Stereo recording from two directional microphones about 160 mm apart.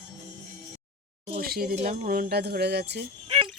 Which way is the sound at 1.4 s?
70° right (ahead or behind).